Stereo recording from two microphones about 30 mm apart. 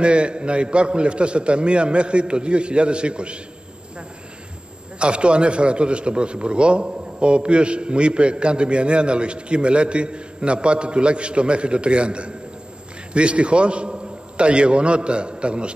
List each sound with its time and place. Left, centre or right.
0.0 s a man's voice: right
4.9 s a man's voice: right